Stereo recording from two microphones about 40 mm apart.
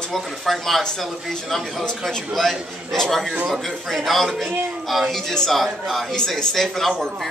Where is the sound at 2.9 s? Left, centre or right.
Centre.